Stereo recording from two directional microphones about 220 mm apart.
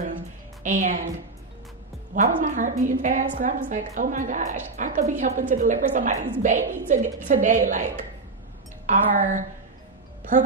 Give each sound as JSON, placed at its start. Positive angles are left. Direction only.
{"t": 0.7, "sound": "a woman's voice", "side_deg": -35}
{"t": 2.1, "sound": "a woman's voice", "side_deg": -35}